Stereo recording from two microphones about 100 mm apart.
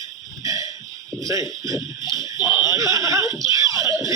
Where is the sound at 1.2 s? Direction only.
35° right (ahead or behind).